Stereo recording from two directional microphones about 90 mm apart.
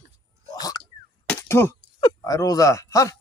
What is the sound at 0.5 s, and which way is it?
Hiccup, 45° left (ahead or behind).